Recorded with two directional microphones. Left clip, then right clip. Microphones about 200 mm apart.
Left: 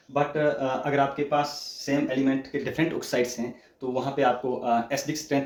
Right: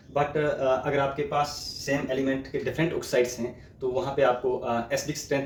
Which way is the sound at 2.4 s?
30° left (ahead or behind).